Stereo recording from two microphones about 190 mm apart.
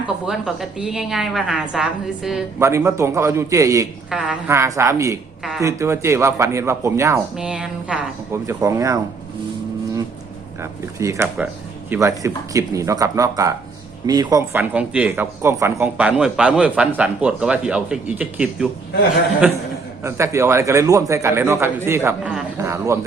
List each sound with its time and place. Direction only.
0.3 s a woman's voice: centre (ahead or behind)
2.6 s speech: 15° right (ahead or behind)
4.1 s speech: 5° right (ahead or behind)
5.4 s a sound: centre (ahead or behind)
5.6 s speech: 15° right (ahead or behind)
7.3 s speech: 5° right (ahead or behind)
10.6 s speech: 15° right (ahead or behind)
20.1 s speech: 15° right (ahead or behind)